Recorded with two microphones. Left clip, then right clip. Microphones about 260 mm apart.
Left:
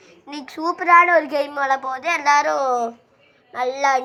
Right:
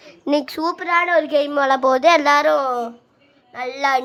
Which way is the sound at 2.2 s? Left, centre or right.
Centre.